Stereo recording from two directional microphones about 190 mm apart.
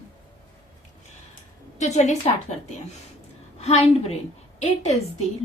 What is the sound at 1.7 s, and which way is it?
Speech, 35° left (ahead or behind).